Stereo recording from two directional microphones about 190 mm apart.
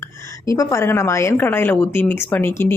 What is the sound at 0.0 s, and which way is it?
A woman's voice, 15° left (ahead or behind).